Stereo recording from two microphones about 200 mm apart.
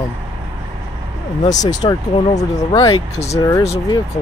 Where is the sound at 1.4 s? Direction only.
35° left (ahead or behind).